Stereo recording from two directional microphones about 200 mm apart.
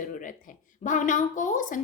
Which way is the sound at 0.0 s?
40° left (ahead or behind).